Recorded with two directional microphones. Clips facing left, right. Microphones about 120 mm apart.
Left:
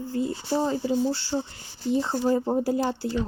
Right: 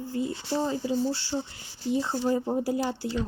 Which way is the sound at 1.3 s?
25° left (ahead or behind).